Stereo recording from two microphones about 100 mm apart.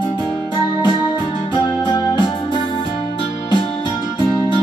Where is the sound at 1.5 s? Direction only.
50° left (ahead or behind).